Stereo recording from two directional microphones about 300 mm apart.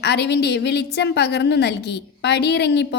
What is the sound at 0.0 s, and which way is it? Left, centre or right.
A woman's voice, left.